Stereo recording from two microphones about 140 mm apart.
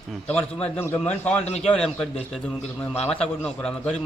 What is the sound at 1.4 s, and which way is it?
Speech, 50° left (ahead or behind).